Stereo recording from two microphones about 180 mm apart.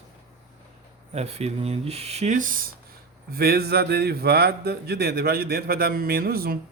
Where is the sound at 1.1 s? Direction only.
35° right (ahead or behind).